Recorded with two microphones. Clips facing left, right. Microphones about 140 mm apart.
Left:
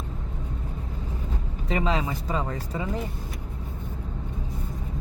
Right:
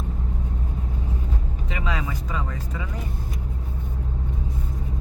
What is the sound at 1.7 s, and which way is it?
Speech, 30° left (ahead or behind).